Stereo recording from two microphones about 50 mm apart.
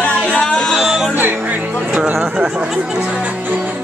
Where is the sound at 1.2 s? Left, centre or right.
Right.